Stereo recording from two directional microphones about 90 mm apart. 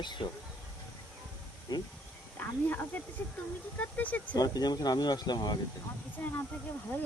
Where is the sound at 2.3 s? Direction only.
20° left (ahead or behind).